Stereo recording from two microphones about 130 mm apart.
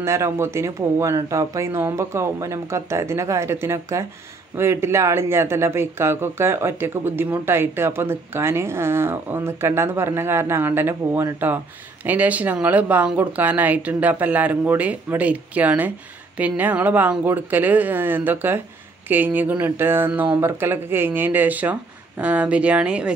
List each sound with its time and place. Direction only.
0.0 s speech: 20° right (ahead or behind)